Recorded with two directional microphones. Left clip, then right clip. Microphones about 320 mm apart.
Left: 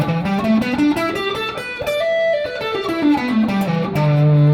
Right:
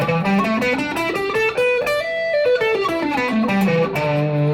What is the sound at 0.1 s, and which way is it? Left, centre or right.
Music, right.